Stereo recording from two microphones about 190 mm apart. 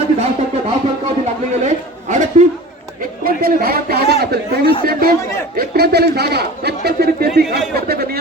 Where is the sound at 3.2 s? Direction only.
50° right (ahead or behind).